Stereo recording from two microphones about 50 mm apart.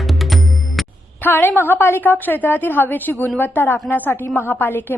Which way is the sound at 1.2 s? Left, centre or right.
Left.